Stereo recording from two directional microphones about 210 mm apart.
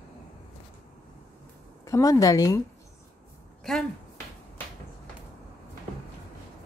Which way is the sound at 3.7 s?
Centre (ahead or behind).